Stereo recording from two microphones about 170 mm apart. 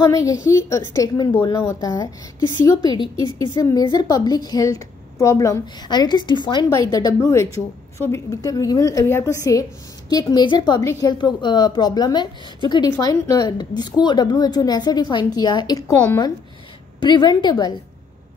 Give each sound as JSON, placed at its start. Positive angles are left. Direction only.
{"t": 0.0, "sound": "a woman's voice", "side_deg": 20}